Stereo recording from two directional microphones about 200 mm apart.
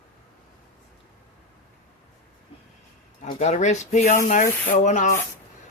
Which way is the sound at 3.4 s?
35° left (ahead or behind).